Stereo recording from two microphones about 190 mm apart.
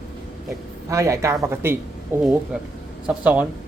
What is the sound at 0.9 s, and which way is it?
Speech, 15° right (ahead or behind).